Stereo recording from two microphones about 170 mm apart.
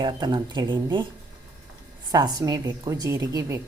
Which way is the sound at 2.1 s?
20° right (ahead or behind).